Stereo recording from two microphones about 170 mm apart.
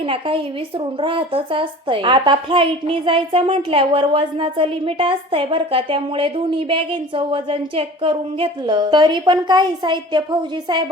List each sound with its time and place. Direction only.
0.0 s a woman's voice: 30° right (ahead or behind)